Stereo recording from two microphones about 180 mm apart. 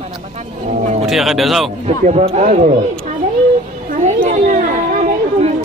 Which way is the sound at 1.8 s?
40° right (ahead or behind).